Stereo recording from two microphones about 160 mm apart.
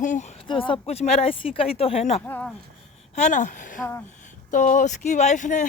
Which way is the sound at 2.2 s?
10° left (ahead or behind).